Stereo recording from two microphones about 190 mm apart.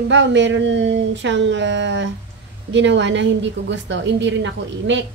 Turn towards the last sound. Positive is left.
turn(degrees=-70)  # may be behind; listen again after turning